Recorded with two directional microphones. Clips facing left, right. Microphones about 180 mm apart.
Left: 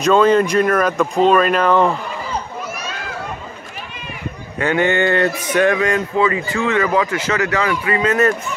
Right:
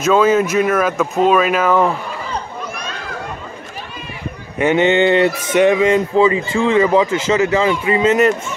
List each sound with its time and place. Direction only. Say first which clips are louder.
0.0 s speech: even; 5° right (ahead or behind)
4.6 s speech: right 4 dB; 20° right (ahead or behind)